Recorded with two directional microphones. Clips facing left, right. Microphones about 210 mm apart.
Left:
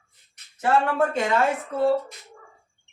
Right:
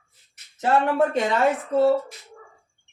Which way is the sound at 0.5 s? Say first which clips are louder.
Right 1 dB; 20° right (ahead or behind).